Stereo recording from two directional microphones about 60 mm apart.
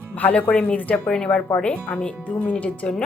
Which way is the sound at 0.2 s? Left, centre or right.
Left.